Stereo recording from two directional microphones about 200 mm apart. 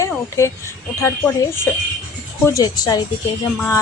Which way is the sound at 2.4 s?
15° left (ahead or behind).